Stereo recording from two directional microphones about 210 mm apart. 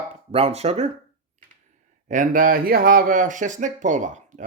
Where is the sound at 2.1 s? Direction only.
40° right (ahead or behind).